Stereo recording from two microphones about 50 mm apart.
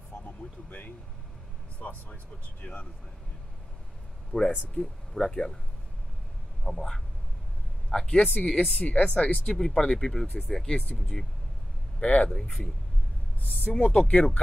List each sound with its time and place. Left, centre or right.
0.1 s a sound: left
0.7 s speech: left
4.3 s speech: left
4.8 s speech: left
5.1 s speech: centre
6.6 s speech: centre
8.2 s speech: left; by 10.2 s centre
10.2 s speech: left
10.5 s speech: centre
10.8 s speech: left
13.7 s speech: left